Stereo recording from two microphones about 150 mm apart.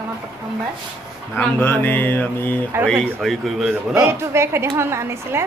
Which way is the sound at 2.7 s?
15° right (ahead or behind).